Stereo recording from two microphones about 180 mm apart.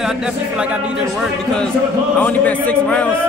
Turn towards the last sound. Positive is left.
turn(degrees=5)  # may be behind; listen again after turning